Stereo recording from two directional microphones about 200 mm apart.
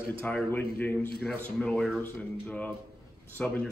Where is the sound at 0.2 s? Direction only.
10° left (ahead or behind).